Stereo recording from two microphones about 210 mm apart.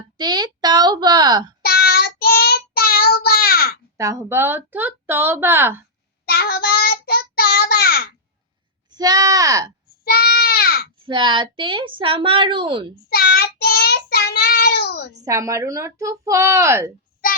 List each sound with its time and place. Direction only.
0.2 s a woman's voice: 20° right (ahead or behind)
1.6 s child singing: 50° left (ahead or behind)
3.9 s speech: 15° right (ahead or behind)
6.2 s child singing: 45° left (ahead or behind)
8.9 s speech: 20° right (ahead or behind)
10.0 s goat: 50° left (ahead or behind)
11.0 s a woman's voice: 25° right (ahead or behind)
13.1 s child singing: 50° left (ahead or behind)
15.1 s speech: 15° right (ahead or behind)